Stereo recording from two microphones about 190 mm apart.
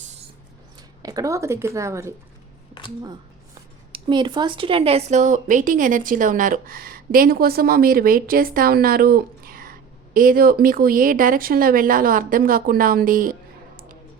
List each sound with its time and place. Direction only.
1.0 s speech: 20° right (ahead or behind)
3.9 s speech: 25° right (ahead or behind); by 13.3 s 45° right (ahead or behind)